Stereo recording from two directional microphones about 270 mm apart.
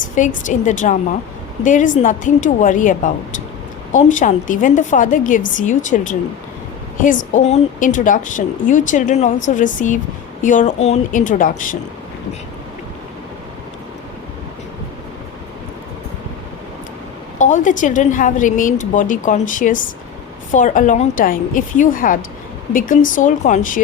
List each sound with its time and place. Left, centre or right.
0.2 s a woman's voice: left
17.3 s a woman's voice: left